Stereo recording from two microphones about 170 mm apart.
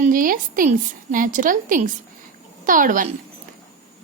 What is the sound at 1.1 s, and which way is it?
A woman's voice, 50° right (ahead or behind).